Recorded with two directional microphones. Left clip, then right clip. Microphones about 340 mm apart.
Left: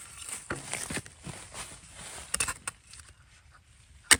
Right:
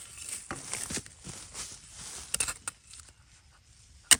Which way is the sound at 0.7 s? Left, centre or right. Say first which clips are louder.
Left 2 dB; left.